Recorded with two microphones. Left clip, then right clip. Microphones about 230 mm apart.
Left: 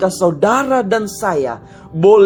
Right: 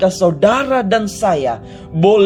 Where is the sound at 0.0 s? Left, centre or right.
Left.